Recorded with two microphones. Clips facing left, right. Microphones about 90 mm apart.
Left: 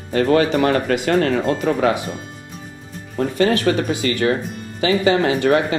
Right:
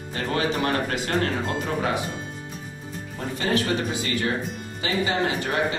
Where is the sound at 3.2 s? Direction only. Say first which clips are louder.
Left 8 dB; 90° left.